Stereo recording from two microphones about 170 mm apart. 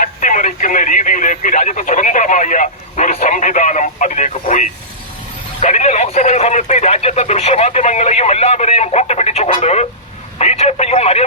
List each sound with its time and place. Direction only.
0.0 s speech: 45° left (ahead or behind)